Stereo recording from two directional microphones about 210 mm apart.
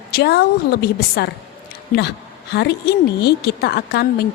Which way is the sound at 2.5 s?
50° left (ahead or behind).